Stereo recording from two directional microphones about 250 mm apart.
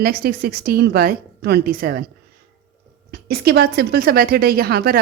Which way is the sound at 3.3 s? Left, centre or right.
Right.